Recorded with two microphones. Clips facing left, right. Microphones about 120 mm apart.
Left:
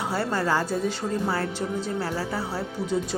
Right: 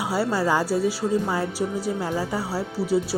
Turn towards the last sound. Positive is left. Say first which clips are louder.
# right 4 dB
turn(degrees=-5)  # may be behind; listen again after turning